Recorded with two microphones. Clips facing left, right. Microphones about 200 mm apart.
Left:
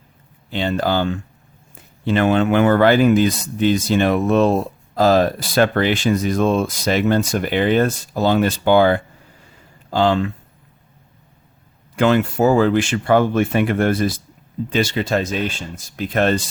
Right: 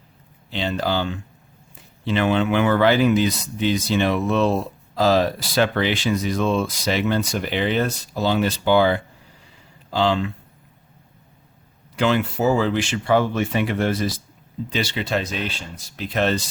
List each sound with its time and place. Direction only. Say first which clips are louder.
0.5 s speech: left 4 dB; 50° left (ahead or behind)
11.9 s speech: left 5 dB; 50° left (ahead or behind)